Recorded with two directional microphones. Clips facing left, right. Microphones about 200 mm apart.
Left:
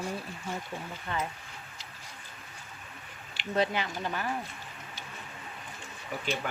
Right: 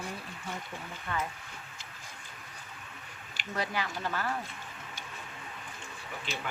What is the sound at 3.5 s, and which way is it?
Speech, 25° left (ahead or behind).